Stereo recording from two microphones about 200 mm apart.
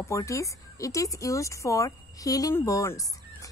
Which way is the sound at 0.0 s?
15° left (ahead or behind).